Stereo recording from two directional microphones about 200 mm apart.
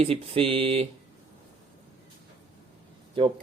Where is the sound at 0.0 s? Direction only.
30° right (ahead or behind).